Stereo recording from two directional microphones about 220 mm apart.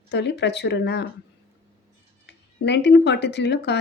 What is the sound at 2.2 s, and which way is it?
Speech, 50° left (ahead or behind).